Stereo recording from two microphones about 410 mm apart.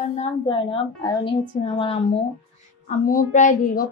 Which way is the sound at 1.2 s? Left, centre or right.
Centre.